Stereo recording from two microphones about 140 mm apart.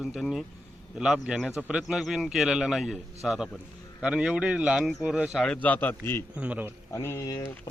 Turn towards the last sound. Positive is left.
turn(degrees=25)  # may be behind; listen again after turning